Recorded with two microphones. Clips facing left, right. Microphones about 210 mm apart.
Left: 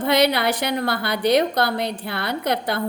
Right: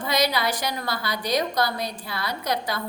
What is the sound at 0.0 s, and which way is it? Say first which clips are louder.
A woman's voice: left 6 dB; 60° left (ahead or behind).